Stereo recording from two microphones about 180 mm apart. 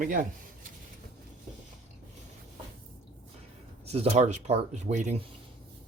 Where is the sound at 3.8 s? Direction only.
35° right (ahead or behind).